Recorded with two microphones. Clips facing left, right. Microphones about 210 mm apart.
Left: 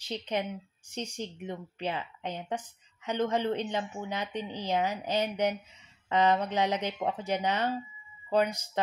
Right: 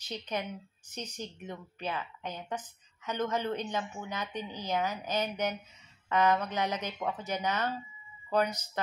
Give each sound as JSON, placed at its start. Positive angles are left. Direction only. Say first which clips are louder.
{"t": 0.1, "sound": "speech", "louder": "left 4 dB", "side_deg": 30}